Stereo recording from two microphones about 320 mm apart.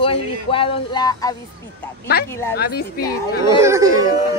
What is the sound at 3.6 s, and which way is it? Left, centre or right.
Speech, centre.